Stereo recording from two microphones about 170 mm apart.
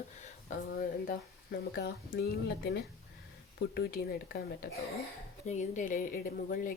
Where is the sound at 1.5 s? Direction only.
70° left (ahead or behind).